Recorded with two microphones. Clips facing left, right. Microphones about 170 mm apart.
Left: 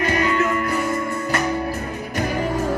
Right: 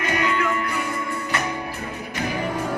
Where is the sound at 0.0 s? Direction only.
40° left (ahead or behind).